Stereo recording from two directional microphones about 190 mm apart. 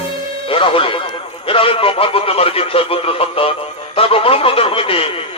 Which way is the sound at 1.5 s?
30° left (ahead or behind).